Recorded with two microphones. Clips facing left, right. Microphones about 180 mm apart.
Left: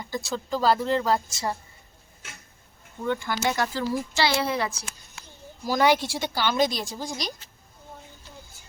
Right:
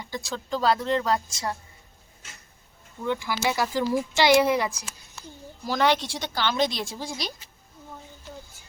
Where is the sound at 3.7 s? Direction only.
15° right (ahead or behind).